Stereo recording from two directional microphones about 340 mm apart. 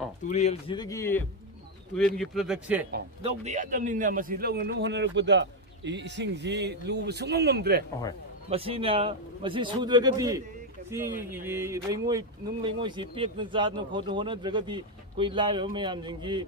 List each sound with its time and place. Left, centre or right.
0.2 s speech: centre
3.2 s a man's voice: centre
8.5 s speech: centre